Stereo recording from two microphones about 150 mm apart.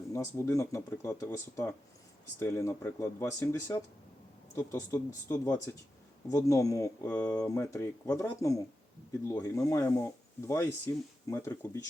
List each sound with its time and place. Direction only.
0.1 s speech: 20° left (ahead or behind)